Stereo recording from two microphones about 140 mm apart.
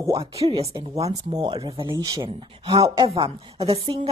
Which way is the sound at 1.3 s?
30° right (ahead or behind).